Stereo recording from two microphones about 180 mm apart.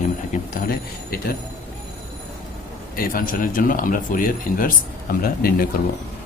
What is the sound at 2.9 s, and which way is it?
Speech, 50° left (ahead or behind).